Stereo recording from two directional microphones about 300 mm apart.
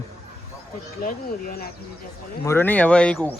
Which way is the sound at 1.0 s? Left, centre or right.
Left.